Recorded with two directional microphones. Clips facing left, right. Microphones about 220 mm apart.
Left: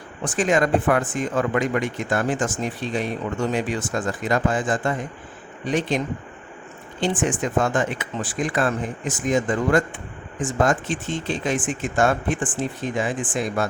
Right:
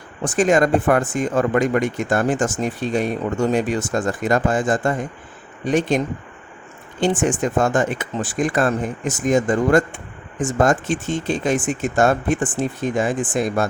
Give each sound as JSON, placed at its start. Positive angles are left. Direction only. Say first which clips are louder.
{"t": 0.3, "sound": "speech", "louder": "right 4 dB", "side_deg": -45}
{"t": 7.0, "sound": "speech", "louder": "right 4 dB", "side_deg": -45}